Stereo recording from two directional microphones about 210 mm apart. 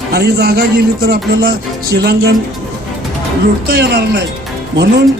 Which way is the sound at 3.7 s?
50° right (ahead or behind).